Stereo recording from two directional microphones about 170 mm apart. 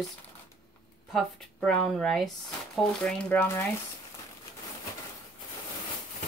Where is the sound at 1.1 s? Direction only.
Centre (ahead or behind).